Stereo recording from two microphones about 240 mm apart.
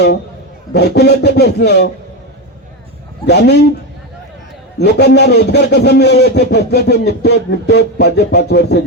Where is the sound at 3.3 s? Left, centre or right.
Left.